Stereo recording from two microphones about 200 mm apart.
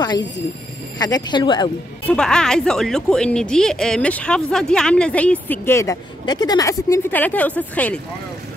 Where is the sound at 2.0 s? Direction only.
5° left (ahead or behind).